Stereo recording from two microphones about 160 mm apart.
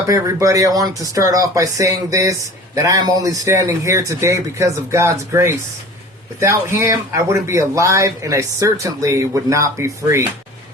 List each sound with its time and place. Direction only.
0.1 s speech: 20° right (ahead or behind)